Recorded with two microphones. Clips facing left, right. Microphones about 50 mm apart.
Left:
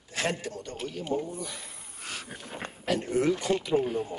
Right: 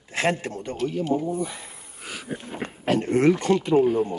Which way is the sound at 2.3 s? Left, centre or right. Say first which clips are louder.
Right 7 dB; right.